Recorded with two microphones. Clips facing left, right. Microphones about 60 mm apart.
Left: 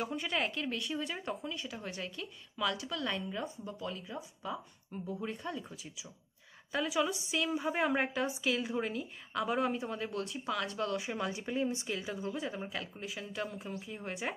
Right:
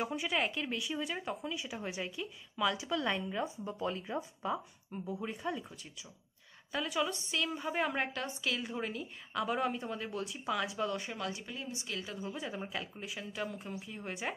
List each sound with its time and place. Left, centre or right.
0.0 s speech: centre
3.8 s speech: right
4.9 s speech: centre
6.7 s a woman's voice: centre
11.1 s speech: left
11.9 s speech: centre
12.2 s a woman's voice: centre